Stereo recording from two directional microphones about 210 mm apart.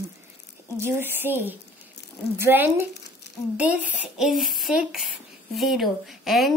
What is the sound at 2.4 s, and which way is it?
A woman's voice, 10° right (ahead or behind).